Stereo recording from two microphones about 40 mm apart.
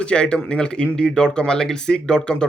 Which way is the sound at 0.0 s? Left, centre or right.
Left.